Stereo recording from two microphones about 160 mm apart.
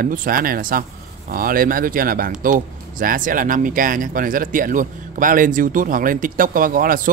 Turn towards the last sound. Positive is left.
turn(degrees=-60)  # may be behind; listen again after turning